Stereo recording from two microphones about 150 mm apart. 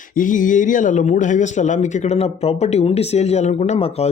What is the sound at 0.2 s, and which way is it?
A man's voice, 60° left (ahead or behind).